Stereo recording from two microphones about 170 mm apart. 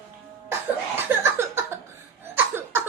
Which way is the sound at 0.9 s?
15° right (ahead or behind).